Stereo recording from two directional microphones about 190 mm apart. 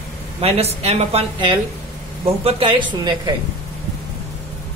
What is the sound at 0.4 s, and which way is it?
Speech, 30° right (ahead or behind).